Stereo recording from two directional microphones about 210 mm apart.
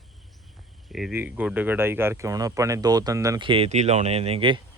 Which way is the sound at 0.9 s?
5° right (ahead or behind).